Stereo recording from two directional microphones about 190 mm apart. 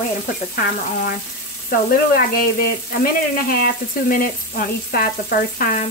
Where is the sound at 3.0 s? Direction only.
50° left (ahead or behind).